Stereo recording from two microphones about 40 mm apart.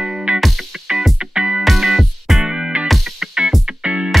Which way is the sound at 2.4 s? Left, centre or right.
Right.